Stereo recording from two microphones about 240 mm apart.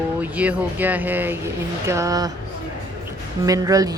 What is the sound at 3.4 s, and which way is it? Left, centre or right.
Speech, centre.